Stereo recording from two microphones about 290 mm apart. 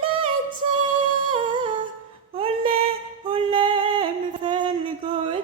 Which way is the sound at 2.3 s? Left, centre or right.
Centre.